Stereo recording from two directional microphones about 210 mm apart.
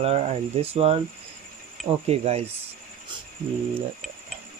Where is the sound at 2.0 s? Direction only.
30° right (ahead or behind).